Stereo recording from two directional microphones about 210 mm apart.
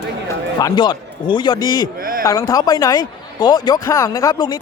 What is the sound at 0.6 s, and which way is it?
A man's voice, 20° left (ahead or behind).